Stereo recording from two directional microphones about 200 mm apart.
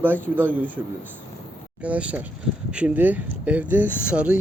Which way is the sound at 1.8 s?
5° right (ahead or behind).